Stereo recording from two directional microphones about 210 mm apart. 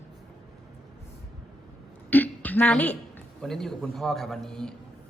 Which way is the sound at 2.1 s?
10° left (ahead or behind).